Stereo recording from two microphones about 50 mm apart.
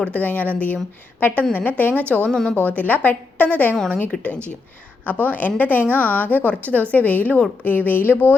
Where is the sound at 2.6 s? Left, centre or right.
Left.